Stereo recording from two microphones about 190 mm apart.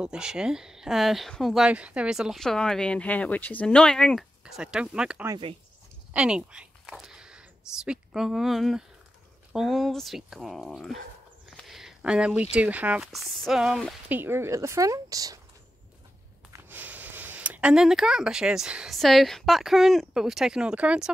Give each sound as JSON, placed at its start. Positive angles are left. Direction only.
{"t": 0.0, "sound": "speech", "side_deg": -5}
{"t": 5.3, "sound": "speech", "side_deg": -30}
{"t": 6.1, "sound": "speech", "side_deg": -5}
{"t": 16.5, "sound": "speech", "side_deg": -10}